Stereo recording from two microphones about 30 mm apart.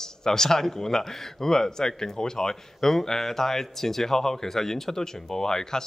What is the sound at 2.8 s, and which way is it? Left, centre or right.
Speech, centre.